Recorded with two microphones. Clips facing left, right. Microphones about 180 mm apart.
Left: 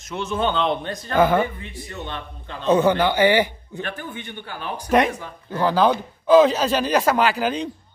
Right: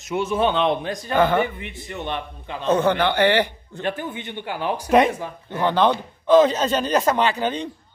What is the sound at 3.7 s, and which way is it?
A man's voice, 20° right (ahead or behind).